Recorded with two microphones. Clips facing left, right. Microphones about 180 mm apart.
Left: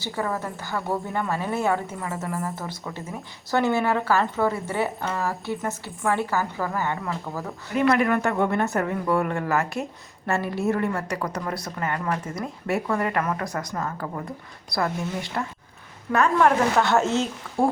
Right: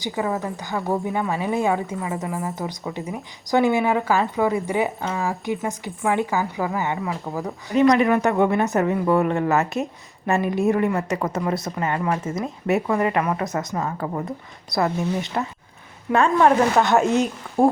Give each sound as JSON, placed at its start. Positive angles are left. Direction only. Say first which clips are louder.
{"t": 0.0, "sound": "a woman's voice", "louder": "right 3 dB", "side_deg": -15}